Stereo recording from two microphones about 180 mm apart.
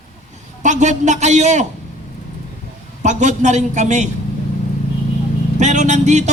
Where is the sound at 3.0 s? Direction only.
40° right (ahead or behind).